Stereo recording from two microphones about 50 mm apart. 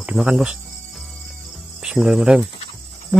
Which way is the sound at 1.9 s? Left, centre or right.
Centre.